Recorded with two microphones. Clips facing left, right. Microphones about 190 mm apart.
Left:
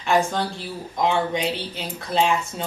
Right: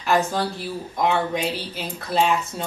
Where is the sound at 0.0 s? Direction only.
5° right (ahead or behind).